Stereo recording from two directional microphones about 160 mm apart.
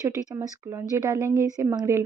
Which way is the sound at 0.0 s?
20° right (ahead or behind).